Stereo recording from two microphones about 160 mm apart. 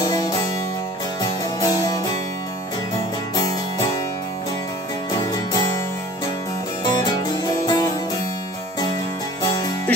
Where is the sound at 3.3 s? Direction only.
20° left (ahead or behind).